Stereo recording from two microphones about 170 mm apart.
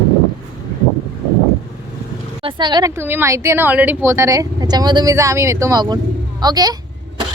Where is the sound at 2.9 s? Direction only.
15° right (ahead or behind).